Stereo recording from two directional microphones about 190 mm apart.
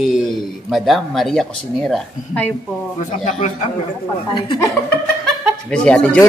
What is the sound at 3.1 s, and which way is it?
Speech, 40° left (ahead or behind).